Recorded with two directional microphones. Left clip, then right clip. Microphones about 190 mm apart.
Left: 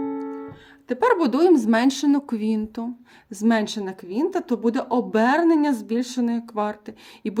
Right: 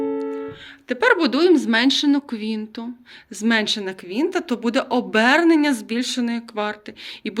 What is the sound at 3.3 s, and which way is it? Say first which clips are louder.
Speech: right 3 dB; 35° left (ahead or behind).